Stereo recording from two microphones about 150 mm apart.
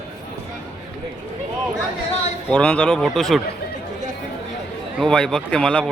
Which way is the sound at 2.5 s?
5° left (ahead or behind).